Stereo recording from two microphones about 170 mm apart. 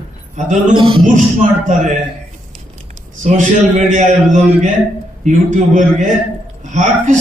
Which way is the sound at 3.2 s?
45° right (ahead or behind).